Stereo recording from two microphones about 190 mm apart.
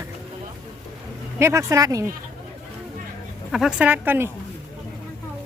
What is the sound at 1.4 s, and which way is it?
Speech, 15° right (ahead or behind).